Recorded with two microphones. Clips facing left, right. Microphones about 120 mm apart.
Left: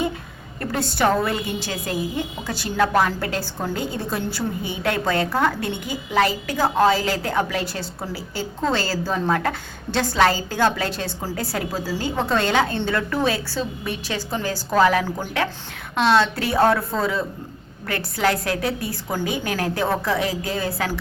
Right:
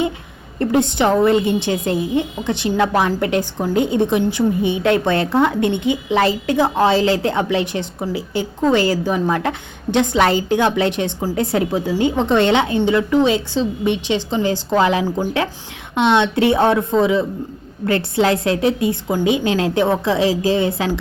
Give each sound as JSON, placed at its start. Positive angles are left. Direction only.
{"t": 0.6, "sound": "a woman's voice", "side_deg": -20}